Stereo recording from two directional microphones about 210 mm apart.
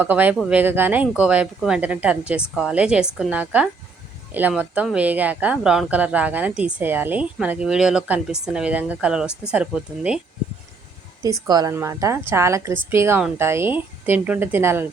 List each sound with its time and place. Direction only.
0.0 s speech: 10° right (ahead or behind)
11.2 s speech: 15° right (ahead or behind)